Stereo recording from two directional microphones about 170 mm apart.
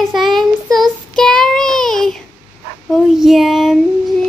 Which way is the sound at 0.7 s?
Centre (ahead or behind).